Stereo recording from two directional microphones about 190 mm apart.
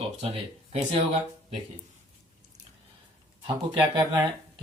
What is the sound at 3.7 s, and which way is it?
Speech, 20° right (ahead or behind).